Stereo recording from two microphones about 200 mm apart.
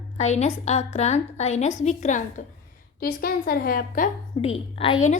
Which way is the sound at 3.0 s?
50° left (ahead or behind).